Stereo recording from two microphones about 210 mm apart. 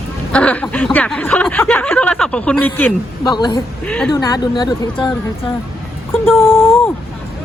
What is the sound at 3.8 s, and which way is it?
Speech, 5° left (ahead or behind).